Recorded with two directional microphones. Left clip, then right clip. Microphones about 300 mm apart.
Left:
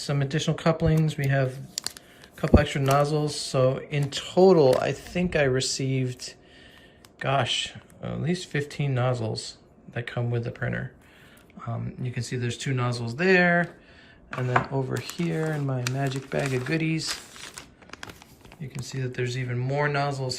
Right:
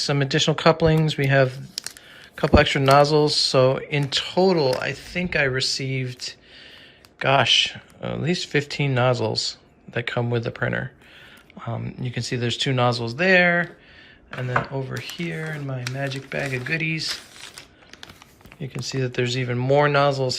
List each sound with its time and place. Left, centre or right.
0.1 s speech: centre
15.0 s speech: centre
17.3 s a sound: left
18.7 s speech: centre